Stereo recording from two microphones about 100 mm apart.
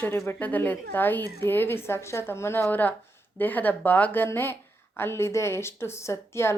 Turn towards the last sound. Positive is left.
turn(degrees=25)  # may be behind; listen again after turning